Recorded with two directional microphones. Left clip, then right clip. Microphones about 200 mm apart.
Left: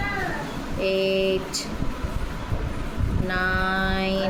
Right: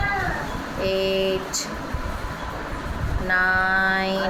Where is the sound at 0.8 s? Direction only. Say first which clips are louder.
Even; 20° left (ahead or behind).